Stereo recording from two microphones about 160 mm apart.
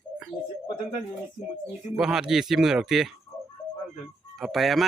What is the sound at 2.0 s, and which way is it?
Speech, 5° right (ahead or behind).